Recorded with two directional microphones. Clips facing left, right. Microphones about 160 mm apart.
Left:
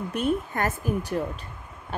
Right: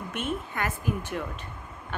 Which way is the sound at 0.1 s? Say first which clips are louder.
Left 6 dB; 40° left (ahead or behind).